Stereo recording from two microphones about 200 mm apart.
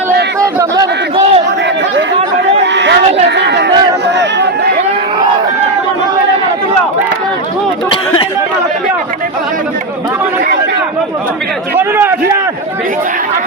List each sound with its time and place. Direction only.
0.3 s chatter: 15° right (ahead or behind)
1.1 s crowd: 30° right (ahead or behind)
2.7 s a sound: 60° right (ahead or behind)
4.0 s run: 60° right (ahead or behind)
7.9 s chatter: 25° left (ahead or behind)
11.8 s a sound: 10° right (ahead or behind)